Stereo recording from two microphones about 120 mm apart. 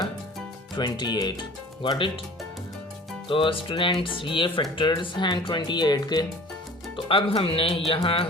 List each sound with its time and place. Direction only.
0.8 s speech: 35° left (ahead or behind)
3.2 s speech: 45° left (ahead or behind)
6.9 s speech: 50° left (ahead or behind)